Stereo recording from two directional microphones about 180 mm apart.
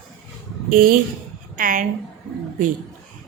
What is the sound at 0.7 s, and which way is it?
A woman's voice, 50° right (ahead or behind).